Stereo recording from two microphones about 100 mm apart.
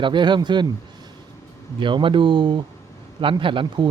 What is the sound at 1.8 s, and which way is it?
A man's voice, 55° right (ahead or behind).